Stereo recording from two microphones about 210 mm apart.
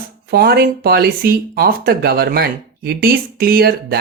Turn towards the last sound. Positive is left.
turn(degrees=-50)  # may be behind; listen again after turning